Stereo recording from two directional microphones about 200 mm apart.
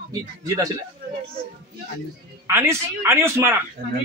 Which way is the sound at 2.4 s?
15° right (ahead or behind).